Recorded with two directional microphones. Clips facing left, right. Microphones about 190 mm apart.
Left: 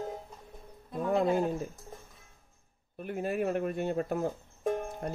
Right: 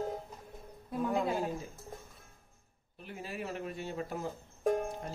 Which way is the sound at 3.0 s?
55° left (ahead or behind).